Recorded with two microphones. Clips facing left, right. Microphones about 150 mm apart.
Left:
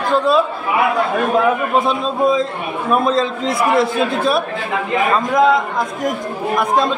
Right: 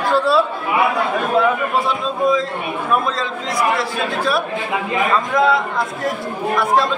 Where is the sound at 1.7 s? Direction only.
20° left (ahead or behind).